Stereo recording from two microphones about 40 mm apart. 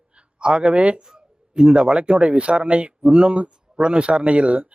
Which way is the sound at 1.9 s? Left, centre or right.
Right.